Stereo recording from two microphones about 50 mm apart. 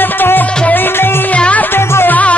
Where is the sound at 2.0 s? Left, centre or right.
Left.